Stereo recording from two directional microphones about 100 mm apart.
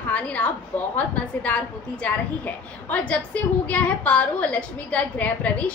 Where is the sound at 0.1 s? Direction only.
15° left (ahead or behind).